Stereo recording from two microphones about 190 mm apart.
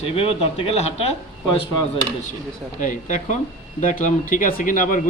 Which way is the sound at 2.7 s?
45° left (ahead or behind).